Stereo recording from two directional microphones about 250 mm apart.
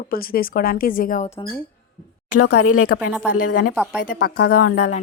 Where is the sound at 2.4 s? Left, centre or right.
Left.